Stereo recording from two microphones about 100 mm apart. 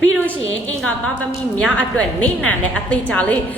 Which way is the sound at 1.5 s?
10° left (ahead or behind).